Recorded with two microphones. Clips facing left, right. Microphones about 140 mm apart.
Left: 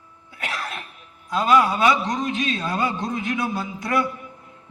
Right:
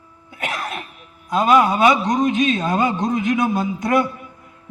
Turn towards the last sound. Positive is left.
turn(degrees=-20)  # may be behind; listen again after turning